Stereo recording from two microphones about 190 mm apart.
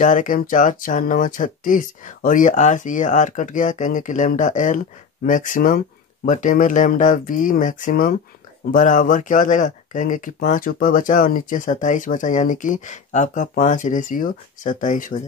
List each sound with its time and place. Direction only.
0.0 s speech: 40° left (ahead or behind)